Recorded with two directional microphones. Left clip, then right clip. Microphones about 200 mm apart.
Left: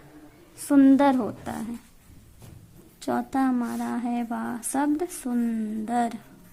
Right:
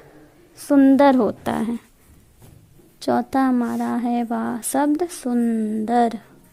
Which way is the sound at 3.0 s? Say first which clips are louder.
Right 6 dB; 35° right (ahead or behind).